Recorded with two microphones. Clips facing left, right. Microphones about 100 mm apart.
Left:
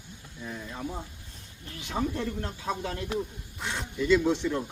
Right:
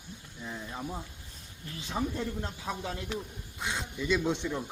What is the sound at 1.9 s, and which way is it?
Speech, 15° right (ahead or behind).